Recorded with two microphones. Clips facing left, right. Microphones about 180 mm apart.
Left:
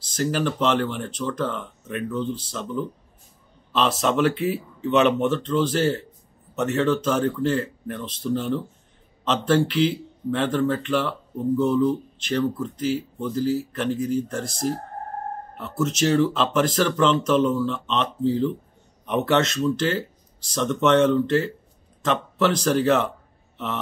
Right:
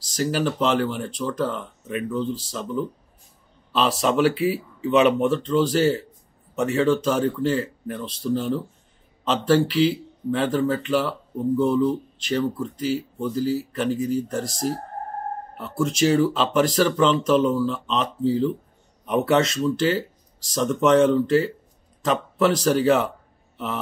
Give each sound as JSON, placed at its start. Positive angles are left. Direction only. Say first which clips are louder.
{"t": 0.2, "sound": "speech", "louder": "even", "side_deg": -5}
{"t": 14.4, "sound": "speech", "louder": "even", "side_deg": -40}
{"t": 15.5, "sound": "speech", "louder": "even", "side_deg": -5}